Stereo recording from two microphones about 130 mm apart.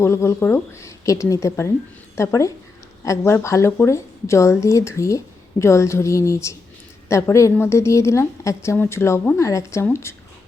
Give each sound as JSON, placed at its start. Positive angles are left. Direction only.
{"t": 0.0, "sound": "a woman's voice", "side_deg": 20}